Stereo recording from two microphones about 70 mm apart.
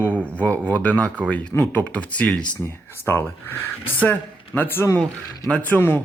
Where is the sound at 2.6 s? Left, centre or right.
Left.